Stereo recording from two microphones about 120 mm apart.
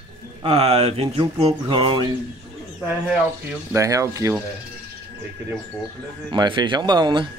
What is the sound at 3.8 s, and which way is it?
Speech, 25° right (ahead or behind).